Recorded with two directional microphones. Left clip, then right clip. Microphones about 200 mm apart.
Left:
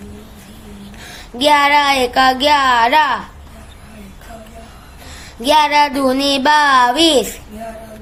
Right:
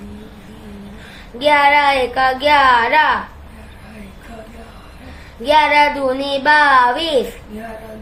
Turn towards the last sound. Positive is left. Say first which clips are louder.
# left 1 dB
turn(degrees=65)  # may be behind; listen again after turning